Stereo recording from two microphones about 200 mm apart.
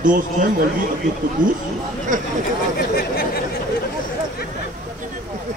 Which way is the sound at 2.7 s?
50° left (ahead or behind).